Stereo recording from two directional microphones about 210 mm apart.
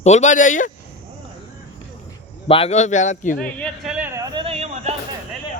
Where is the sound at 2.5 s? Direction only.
25° left (ahead or behind).